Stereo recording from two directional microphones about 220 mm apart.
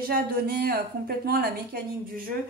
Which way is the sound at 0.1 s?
45° right (ahead or behind).